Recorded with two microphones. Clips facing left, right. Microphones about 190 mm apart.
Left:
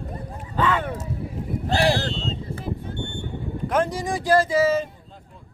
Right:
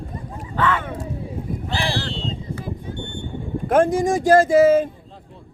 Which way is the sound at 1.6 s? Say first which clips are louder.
Left 6 dB; 45° left (ahead or behind).